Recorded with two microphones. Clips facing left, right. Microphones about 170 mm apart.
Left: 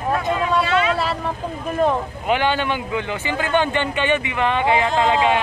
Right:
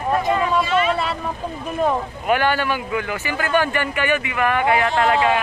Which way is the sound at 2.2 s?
20° left (ahead or behind).